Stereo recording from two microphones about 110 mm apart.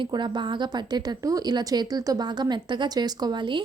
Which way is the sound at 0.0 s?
45° right (ahead or behind).